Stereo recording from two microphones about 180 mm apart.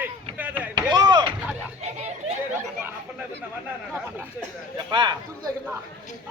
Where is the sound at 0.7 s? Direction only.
20° right (ahead or behind).